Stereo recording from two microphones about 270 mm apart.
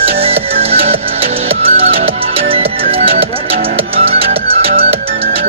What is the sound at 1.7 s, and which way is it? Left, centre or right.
Music, right.